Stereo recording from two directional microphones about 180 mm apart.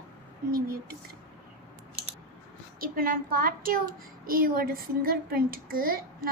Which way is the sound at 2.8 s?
55° right (ahead or behind).